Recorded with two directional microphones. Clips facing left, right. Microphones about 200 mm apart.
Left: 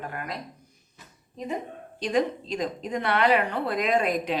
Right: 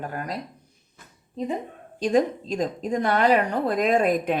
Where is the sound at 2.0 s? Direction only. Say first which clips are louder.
Right 4 dB; 45° right (ahead or behind).